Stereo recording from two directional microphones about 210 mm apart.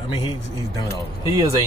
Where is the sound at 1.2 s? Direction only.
15° right (ahead or behind).